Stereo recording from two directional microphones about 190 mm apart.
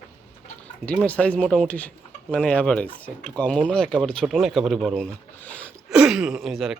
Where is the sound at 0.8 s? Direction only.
5° left (ahead or behind).